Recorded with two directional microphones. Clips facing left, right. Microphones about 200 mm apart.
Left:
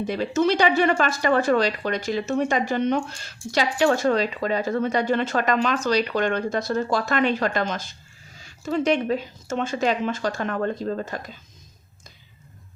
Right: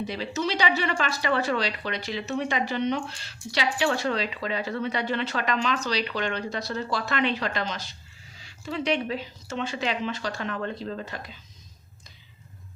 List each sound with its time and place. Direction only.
0.0 s speech: 50° left (ahead or behind)